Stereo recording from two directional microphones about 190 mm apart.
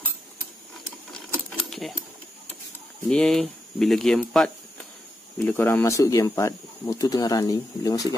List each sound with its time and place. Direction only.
1.6 s sewing machine: centre (ahead or behind)
3.1 s speech: 5° left (ahead or behind); by 8.1 s 20° left (ahead or behind)